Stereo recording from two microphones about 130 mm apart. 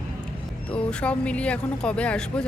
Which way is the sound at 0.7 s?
10° left (ahead or behind).